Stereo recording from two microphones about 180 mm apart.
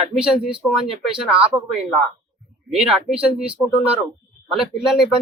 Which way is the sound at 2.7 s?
5° right (ahead or behind).